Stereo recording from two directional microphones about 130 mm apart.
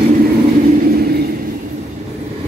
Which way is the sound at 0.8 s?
90° right.